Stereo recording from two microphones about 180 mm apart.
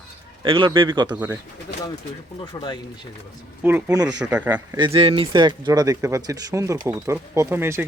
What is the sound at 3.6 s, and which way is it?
Speech, 10° right (ahead or behind).